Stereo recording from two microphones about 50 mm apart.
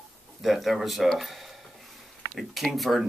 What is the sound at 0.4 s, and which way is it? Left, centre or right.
Speech, centre.